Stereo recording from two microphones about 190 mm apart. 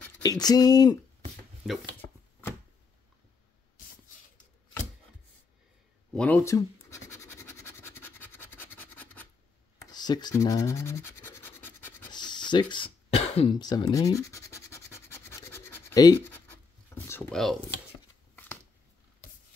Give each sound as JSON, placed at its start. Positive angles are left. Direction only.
{"t": 0.2, "sound": "speech", "side_deg": 20}
{"t": 1.7, "sound": "chopping", "side_deg": 10}
{"t": 6.1, "sound": "scratch", "side_deg": 10}
{"t": 9.9, "sound": "speech", "side_deg": 20}
{"t": 12.1, "sound": "throat clearing", "side_deg": 20}
{"t": 13.6, "sound": "scratch", "side_deg": 20}
{"t": 16.9, "sound": "a sound", "side_deg": 10}